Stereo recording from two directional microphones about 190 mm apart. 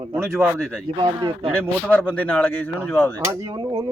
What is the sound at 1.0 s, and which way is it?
Speech, 25° right (ahead or behind).